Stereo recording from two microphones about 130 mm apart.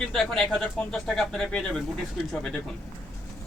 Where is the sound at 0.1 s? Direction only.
5° left (ahead or behind).